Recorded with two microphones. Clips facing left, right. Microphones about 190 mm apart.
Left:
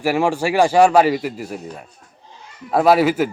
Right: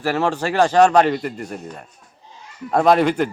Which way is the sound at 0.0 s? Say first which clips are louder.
Left 2 dB; 10° left (ahead or behind).